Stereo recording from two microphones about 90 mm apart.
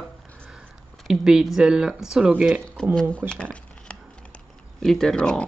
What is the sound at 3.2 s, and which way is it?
Speech, 25° right (ahead or behind).